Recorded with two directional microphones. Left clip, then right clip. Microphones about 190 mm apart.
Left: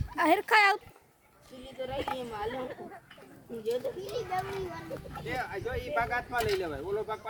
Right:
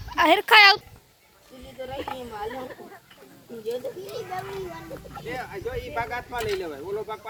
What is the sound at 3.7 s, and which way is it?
Speech, 35° right (ahead or behind).